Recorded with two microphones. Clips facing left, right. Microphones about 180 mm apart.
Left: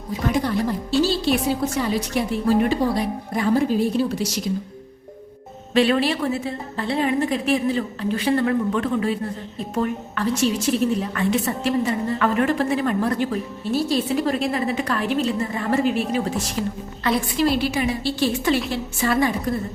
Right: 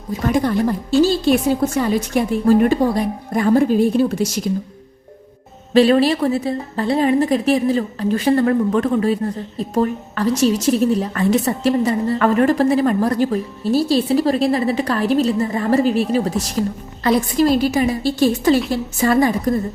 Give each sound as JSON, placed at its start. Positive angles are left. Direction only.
{"t": 0.3, "sound": "a woman's voice", "side_deg": -50}
{"t": 5.7, "sound": "a woman's voice", "side_deg": -35}